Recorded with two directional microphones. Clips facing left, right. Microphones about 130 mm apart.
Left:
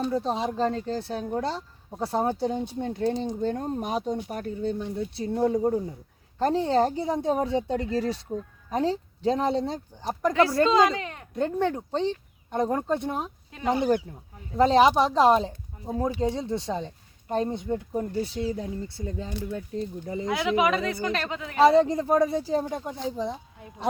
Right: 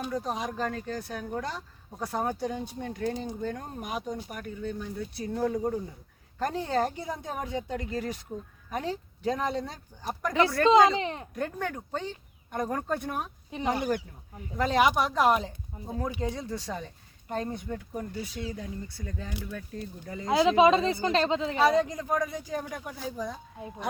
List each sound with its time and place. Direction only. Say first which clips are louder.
0.1 s speech: left 5 dB; 25° left (ahead or behind)
10.7 s speech: right 1 dB; 25° right (ahead or behind)
11.3 s speech: left 10 dB; 25° left (ahead or behind)
20.2 s speech: right 4 dB; 25° right (ahead or behind)
21.6 s speech: left 8 dB; 30° left (ahead or behind)